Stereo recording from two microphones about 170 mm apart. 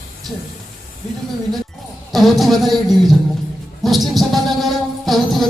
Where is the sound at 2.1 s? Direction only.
Centre (ahead or behind).